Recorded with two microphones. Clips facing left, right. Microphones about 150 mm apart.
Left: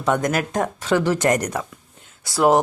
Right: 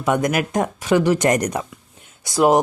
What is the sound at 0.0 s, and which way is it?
Speech, 15° right (ahead or behind).